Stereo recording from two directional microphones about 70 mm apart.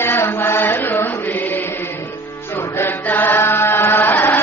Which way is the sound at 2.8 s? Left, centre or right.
Left.